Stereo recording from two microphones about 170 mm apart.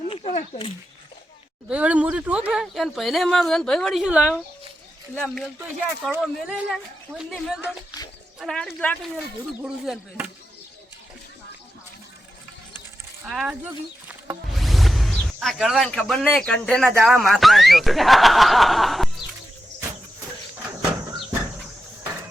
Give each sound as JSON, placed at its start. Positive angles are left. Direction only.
{"t": 0.1, "sound": "a sound", "side_deg": 40}
{"t": 1.7, "sound": "speech", "side_deg": -10}
{"t": 5.5, "sound": "speech", "side_deg": -10}
{"t": 6.2, "sound": "speech", "side_deg": 0}
{"t": 13.2, "sound": "speech", "side_deg": -5}